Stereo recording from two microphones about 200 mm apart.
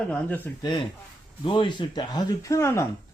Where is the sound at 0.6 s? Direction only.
20° left (ahead or behind).